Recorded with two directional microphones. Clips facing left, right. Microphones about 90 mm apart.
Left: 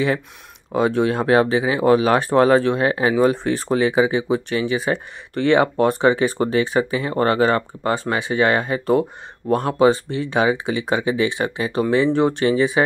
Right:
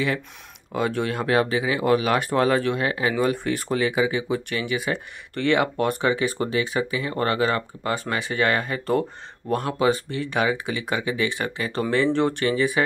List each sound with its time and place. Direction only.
0.7 s speech: 25° left (ahead or behind)